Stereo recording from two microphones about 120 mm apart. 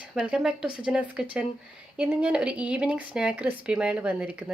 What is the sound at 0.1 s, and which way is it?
A woman's voice, 5° right (ahead or behind).